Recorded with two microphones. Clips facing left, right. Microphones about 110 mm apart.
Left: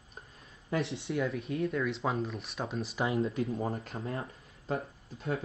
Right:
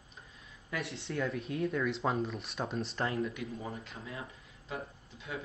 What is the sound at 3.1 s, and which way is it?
Speech, 30° left (ahead or behind).